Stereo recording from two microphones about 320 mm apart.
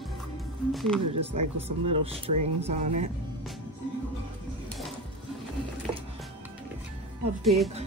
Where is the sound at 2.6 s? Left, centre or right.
Right.